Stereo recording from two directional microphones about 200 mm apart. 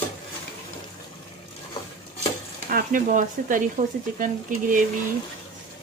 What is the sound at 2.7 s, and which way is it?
Speech, 40° right (ahead or behind).